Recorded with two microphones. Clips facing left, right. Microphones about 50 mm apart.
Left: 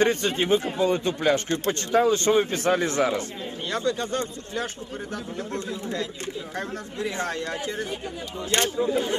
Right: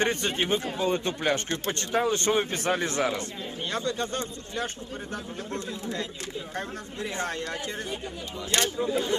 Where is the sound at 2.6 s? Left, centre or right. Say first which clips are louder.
Left 4 dB; left.